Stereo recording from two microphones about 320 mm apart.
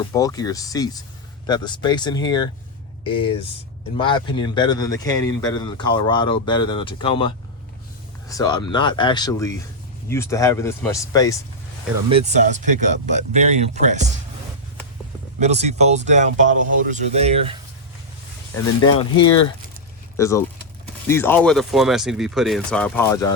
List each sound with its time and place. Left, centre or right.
0.0 s speech: centre
12.2 s speech: right
15.4 s speech: right
20.1 s speech: centre